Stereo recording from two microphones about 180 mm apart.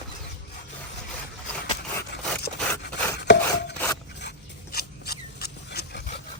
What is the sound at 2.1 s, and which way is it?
Chopping, 65° left (ahead or behind).